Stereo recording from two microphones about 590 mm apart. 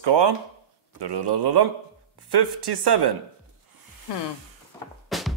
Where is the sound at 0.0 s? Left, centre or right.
Right.